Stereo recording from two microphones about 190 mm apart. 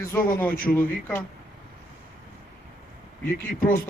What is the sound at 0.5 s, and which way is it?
Speech, 45° left (ahead or behind).